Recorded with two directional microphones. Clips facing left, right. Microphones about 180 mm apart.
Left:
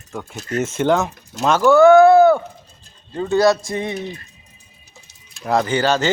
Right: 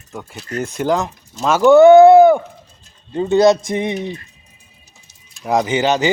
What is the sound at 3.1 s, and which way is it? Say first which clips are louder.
Speech: right 3 dB; 20° right (ahead or behind).